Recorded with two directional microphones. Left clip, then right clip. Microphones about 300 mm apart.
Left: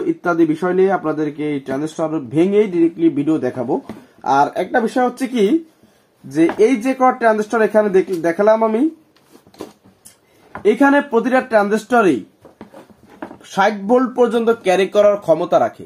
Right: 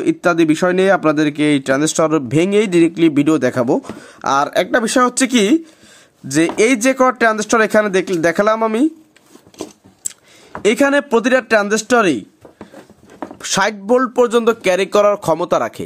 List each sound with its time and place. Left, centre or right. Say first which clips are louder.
0.0 s speech: right 2 dB; right
10.6 s speech: even; right
13.4 s speech: left 1 dB; right